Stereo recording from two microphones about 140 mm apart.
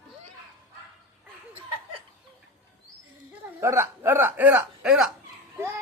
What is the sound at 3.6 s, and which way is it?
Speech, 20° right (ahead or behind).